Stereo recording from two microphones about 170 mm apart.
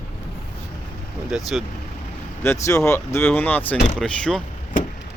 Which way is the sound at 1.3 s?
Centre (ahead or behind).